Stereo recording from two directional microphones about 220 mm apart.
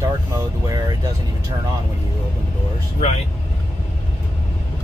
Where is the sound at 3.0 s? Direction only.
30° left (ahead or behind).